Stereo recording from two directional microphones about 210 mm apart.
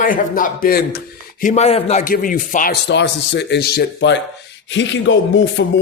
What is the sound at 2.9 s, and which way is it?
Speech, 55° left (ahead or behind).